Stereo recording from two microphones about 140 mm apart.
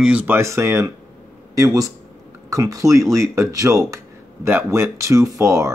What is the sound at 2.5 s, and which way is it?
Speech, 25° right (ahead or behind).